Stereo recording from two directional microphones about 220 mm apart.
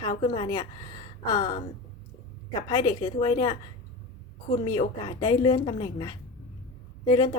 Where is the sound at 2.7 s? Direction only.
20° left (ahead or behind).